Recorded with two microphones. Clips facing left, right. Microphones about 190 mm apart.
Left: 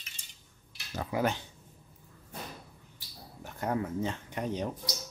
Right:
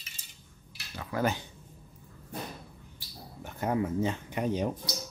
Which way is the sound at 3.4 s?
Centre (ahead or behind).